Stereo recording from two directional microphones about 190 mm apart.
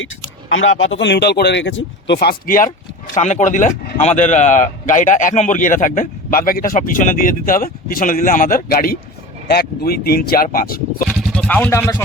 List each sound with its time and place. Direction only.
0.5 s speech: 90° left; by 2.6 s 50° left (ahead or behind)
3.2 s speech: 40° left (ahead or behind)
11.1 s speech: 5° left (ahead or behind)